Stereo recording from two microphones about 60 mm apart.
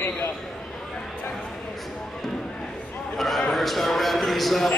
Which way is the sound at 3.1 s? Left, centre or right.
Centre.